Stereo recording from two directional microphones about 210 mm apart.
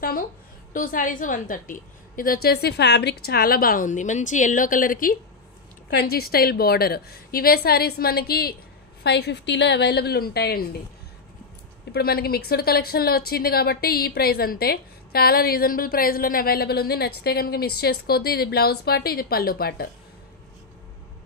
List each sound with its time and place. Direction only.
0.7 s a woman's voice: 40° left (ahead or behind)
11.9 s a woman's voice: 45° left (ahead or behind)